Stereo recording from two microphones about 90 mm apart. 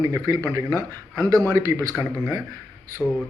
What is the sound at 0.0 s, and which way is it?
Speech, 35° right (ahead or behind).